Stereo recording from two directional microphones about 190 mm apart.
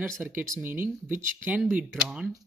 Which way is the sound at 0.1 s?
5° right (ahead or behind).